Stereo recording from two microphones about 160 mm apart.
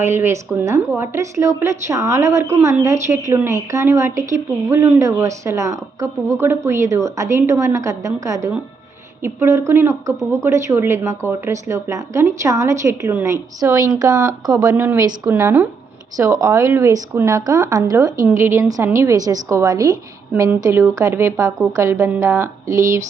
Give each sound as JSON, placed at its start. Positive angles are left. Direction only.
{"t": 0.0, "sound": "a woman's voice", "side_deg": -15}